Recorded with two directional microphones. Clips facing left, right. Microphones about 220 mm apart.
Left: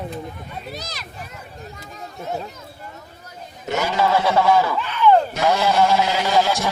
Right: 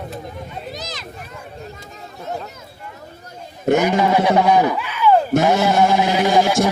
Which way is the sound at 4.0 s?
15° right (ahead or behind).